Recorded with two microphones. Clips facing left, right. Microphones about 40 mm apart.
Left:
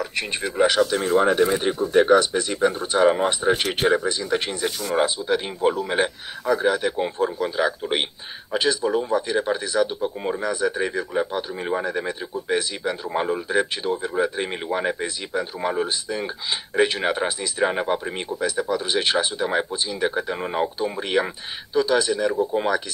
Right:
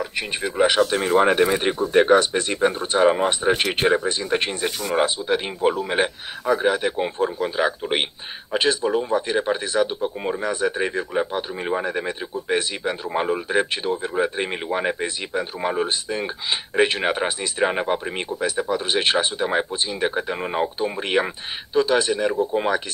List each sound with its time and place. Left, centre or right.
0.0 s speech: centre
0.7 s speech: right